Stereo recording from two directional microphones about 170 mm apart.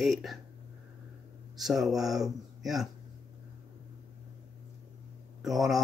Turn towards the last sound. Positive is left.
turn(degrees=0)  # may be behind; listen again after turning